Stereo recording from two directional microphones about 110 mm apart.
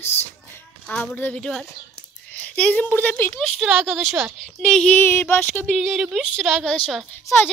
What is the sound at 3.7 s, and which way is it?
Speech, 15° right (ahead or behind).